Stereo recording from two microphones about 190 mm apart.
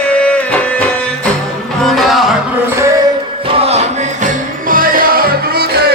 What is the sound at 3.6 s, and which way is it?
Music, 35° right (ahead or behind).